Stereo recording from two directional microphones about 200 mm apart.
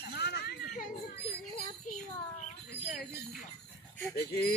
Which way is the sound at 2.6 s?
55° left (ahead or behind).